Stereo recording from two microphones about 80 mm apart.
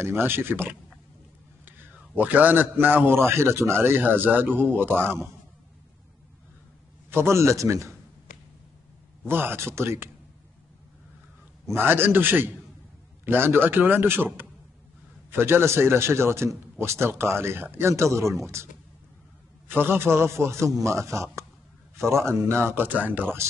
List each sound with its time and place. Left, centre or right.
0.0 s a man's voice: right
2.1 s a man's voice: right
7.1 s speech: right
9.2 s a man's voice: right
11.6 s a man's voice: right
19.7 s a man's voice: right